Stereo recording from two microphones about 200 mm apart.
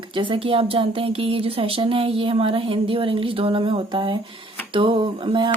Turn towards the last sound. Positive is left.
turn(degrees=-25)  # may be behind; listen again after turning